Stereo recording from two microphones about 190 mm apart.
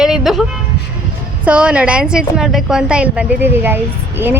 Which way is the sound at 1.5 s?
5° right (ahead or behind).